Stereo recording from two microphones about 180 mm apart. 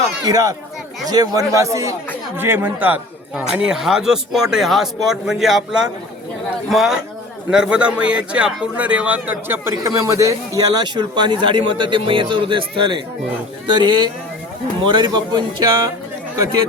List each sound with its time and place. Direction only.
0.3 s a man's voice: 20° right (ahead or behind)